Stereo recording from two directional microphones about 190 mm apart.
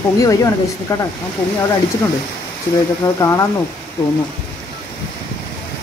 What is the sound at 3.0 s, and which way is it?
Speech, 15° left (ahead or behind).